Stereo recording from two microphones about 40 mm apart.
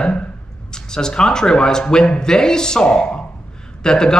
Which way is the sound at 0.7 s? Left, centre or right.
Centre.